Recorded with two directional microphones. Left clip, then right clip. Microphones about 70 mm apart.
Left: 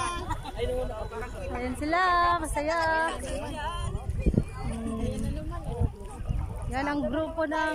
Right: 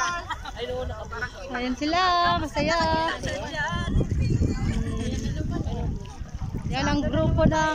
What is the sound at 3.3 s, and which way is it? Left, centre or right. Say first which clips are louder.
Speech: right 5 dB; centre.